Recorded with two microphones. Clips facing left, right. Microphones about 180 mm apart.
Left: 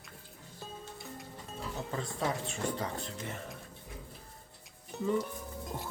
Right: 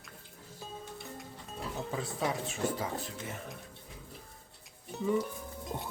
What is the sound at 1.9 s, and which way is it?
Speech, 5° right (ahead or behind).